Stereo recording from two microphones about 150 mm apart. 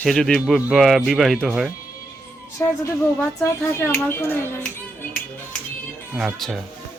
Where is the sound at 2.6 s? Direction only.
20° left (ahead or behind).